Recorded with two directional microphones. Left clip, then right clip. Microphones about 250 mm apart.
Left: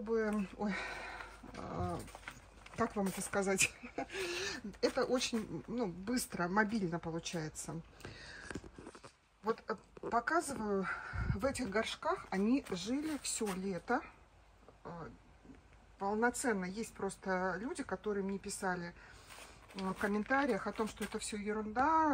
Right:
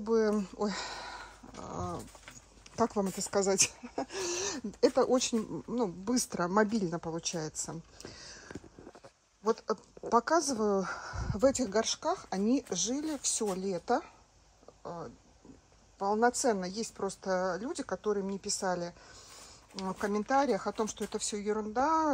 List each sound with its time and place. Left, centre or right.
0.0 s dog: centre
2.7 s speech: centre
9.7 s speech: centre
16.0 s speech: centre